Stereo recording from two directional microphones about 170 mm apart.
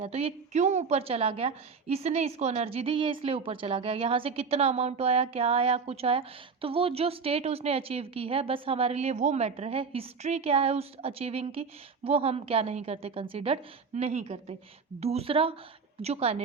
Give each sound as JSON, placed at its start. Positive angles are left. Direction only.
{"t": 0.0, "sound": "a woman's voice", "side_deg": -35}